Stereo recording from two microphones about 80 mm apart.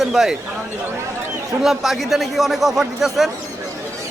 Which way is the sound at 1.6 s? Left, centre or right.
Centre.